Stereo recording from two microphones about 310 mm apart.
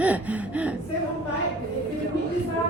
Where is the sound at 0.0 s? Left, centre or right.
Centre.